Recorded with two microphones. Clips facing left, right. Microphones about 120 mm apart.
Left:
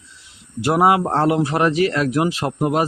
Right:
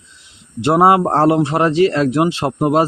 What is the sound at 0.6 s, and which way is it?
Speech, 30° right (ahead or behind).